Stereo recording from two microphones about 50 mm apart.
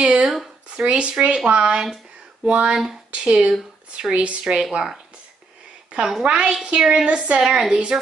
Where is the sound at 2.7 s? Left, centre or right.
Centre.